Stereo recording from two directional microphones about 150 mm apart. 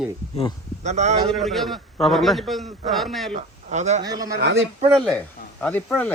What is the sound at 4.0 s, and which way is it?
Speech, 25° right (ahead or behind).